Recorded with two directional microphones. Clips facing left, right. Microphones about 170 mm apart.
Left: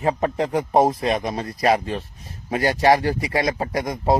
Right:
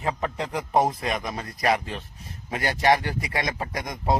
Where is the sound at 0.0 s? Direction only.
35° left (ahead or behind).